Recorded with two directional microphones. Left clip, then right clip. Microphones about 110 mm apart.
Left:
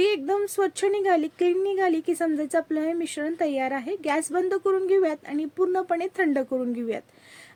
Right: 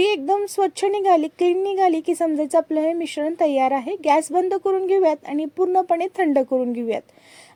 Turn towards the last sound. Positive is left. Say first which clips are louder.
# right 6 dB
turn(degrees=-30)  # may be behind; listen again after turning